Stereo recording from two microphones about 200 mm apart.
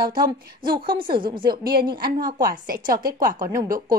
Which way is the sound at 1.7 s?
50° right (ahead or behind).